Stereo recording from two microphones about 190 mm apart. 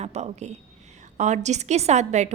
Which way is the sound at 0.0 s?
35° right (ahead or behind).